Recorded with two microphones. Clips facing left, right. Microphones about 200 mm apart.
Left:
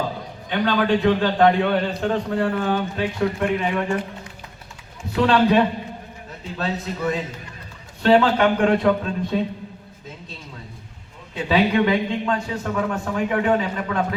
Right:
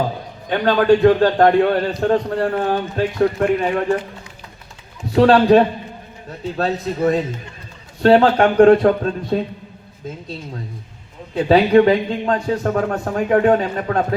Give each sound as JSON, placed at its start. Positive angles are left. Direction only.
{"t": 0.4, "sound": "a man's voice", "side_deg": -45}
{"t": 5.1, "sound": "a man's voice", "side_deg": -35}
{"t": 11.4, "sound": "speech", "side_deg": -40}